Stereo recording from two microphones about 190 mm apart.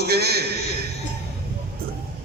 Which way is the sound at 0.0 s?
55° right (ahead or behind).